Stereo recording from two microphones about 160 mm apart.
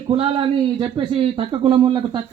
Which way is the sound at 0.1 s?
35° right (ahead or behind).